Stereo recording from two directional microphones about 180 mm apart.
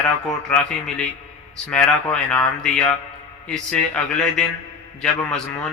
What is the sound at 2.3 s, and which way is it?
A man's voice, 5° left (ahead or behind).